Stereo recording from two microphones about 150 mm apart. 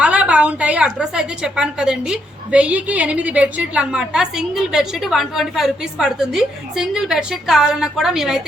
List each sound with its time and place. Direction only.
0.0 s a woman's voice: 10° right (ahead or behind)